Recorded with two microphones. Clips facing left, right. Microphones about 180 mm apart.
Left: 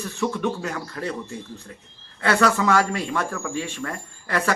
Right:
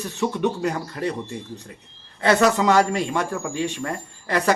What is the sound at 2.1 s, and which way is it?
Speech, 20° right (ahead or behind).